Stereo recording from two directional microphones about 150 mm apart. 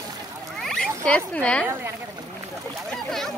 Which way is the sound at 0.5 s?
Centre (ahead or behind).